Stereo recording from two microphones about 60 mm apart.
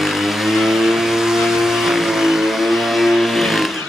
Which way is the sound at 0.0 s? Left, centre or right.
Centre.